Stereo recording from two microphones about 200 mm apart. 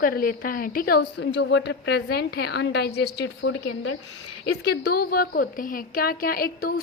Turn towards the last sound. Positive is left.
turn(degrees=50)  # may be behind; listen again after turning